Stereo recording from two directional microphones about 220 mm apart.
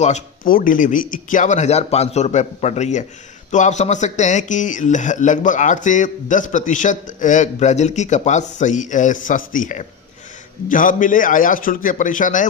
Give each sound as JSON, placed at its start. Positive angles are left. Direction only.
{"t": 0.0, "sound": "speech", "side_deg": 35}